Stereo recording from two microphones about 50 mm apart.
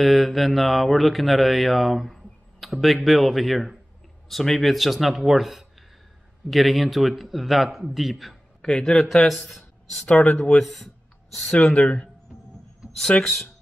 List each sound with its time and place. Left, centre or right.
0.0 s speech: centre
8.6 s speech: centre
9.5 s a sound: centre
10.0 s speech: left
10.6 s speech: centre
11.4 s speech: centre
13.2 s speech: centre